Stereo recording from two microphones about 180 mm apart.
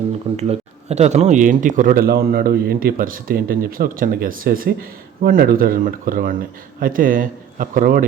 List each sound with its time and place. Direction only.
0.3 s a man's voice: 35° right (ahead or behind)